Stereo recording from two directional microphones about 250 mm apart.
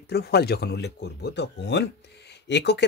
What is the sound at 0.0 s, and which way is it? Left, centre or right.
Speech, left.